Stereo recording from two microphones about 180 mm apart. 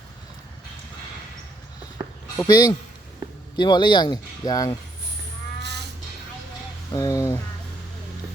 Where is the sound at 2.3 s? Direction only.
20° left (ahead or behind).